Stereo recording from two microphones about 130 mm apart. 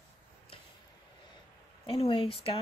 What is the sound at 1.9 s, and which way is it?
Speech, 45° left (ahead or behind).